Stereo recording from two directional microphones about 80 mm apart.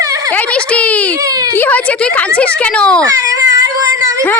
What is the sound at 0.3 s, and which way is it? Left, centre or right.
A woman's voice, centre.